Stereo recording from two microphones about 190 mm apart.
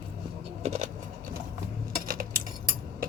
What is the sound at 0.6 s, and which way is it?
Vehicle, 35° right (ahead or behind).